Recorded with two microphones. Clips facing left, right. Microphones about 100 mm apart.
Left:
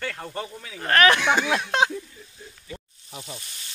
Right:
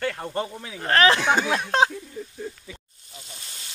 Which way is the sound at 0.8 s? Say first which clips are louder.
Even; 25° right (ahead or behind).